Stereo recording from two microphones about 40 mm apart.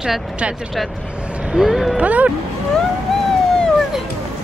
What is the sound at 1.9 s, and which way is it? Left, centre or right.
Speech, right.